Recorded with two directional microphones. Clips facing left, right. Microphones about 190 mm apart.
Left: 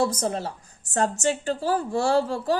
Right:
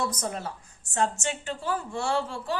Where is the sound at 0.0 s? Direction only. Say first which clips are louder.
Left 6 dB; 30° left (ahead or behind).